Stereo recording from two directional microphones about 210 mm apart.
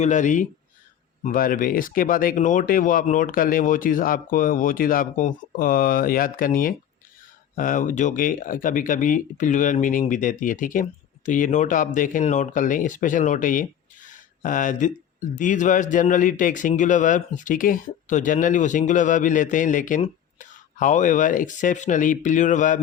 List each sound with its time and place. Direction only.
0.0 s speech: 35° left (ahead or behind)